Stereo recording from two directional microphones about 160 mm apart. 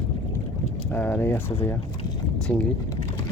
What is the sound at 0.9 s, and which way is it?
Speech, 10° left (ahead or behind).